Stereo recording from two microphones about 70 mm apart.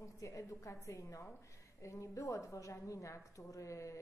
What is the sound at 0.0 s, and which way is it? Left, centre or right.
A woman's voice, left.